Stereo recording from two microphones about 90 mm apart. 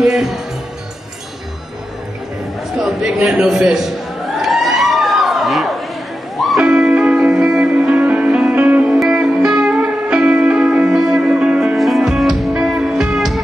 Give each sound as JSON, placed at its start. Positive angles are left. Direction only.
{"t": 0.0, "sound": "speech", "side_deg": -5}
{"t": 2.8, "sound": "a man's voice", "side_deg": -5}
{"t": 4.4, "sound": "crowd", "side_deg": 0}
{"t": 6.3, "sound": "music", "side_deg": 0}
{"t": 6.6, "sound": "music", "side_deg": -15}
{"t": 9.0, "sound": "music", "side_deg": -5}
{"t": 11.7, "sound": "music", "side_deg": 0}